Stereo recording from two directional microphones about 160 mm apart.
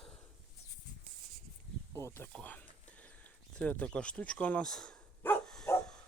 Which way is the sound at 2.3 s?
10° left (ahead or behind).